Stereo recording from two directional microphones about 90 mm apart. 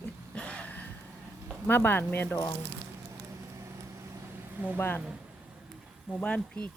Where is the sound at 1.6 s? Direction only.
25° left (ahead or behind).